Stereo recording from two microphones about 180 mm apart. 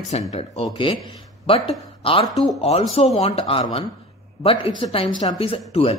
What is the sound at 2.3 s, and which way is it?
Speech, centre (ahead or behind).